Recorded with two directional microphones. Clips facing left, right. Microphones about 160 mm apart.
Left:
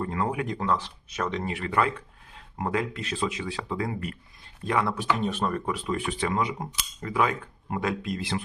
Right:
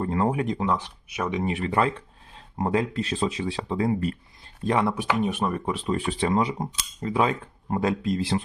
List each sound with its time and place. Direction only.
0.0 s speech: 30° right (ahead or behind); by 1.5 s 15° right (ahead or behind)
1.5 s speech: 25° right (ahead or behind)
4.9 s speech: 15° right (ahead or behind)
5.7 s speech: 30° right (ahead or behind)